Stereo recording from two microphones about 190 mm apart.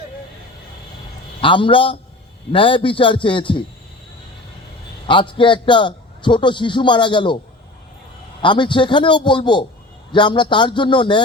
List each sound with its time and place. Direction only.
1.4 s a man's voice: 25° left (ahead or behind)
5.0 s a man's voice: 25° left (ahead or behind)
8.4 s a man's voice: 25° left (ahead or behind)